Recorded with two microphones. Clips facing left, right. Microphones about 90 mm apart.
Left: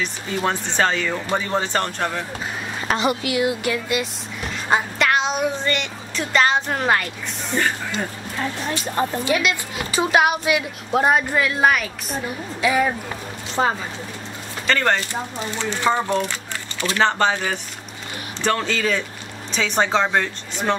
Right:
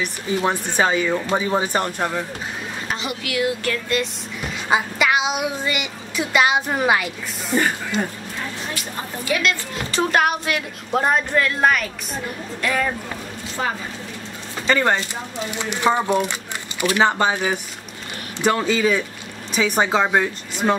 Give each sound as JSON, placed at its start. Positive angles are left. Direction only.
{"t": 0.0, "sound": "speech", "side_deg": -15}
{"t": 3.3, "sound": "speech", "side_deg": 20}
{"t": 4.6, "sound": "a woman's voice", "side_deg": -5}
{"t": 9.2, "sound": "speech", "side_deg": 20}
{"t": 9.8, "sound": "a woman's voice", "side_deg": 5}
{"t": 13.6, "sound": "speech", "side_deg": 35}
{"t": 14.7, "sound": "speech", "side_deg": -15}